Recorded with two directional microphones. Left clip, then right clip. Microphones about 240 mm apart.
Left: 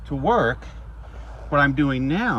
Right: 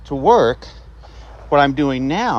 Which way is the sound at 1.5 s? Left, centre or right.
Centre.